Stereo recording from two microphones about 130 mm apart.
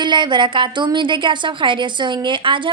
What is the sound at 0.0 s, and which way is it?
A woman's voice, 35° right (ahead or behind).